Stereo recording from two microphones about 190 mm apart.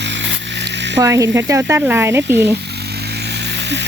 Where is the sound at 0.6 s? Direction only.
65° right (ahead or behind).